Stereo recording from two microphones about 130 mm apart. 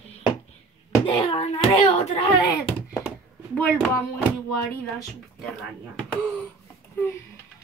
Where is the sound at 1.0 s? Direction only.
45° left (ahead or behind).